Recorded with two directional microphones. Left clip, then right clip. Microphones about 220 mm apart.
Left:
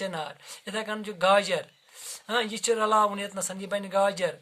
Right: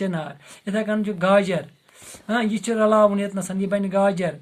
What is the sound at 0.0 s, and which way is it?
Speech, 40° left (ahead or behind).